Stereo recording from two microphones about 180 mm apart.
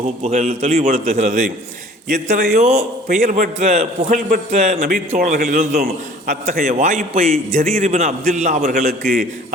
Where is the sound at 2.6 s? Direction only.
35° right (ahead or behind).